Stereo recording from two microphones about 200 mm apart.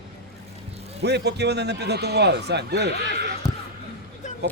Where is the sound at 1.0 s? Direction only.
55° right (ahead or behind).